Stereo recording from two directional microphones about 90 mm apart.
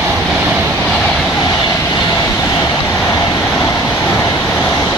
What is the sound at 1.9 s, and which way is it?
Vehicle, 40° left (ahead or behind).